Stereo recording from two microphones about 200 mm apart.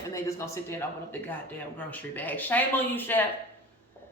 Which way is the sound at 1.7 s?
10° left (ahead or behind).